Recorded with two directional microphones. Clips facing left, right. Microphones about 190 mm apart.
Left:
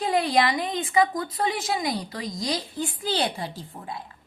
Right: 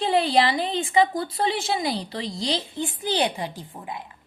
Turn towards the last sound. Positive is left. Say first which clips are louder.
# right 1 dB
turn(degrees=-15)  # may be behind; listen again after turning